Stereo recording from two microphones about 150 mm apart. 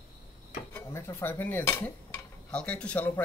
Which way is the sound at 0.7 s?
15° left (ahead or behind).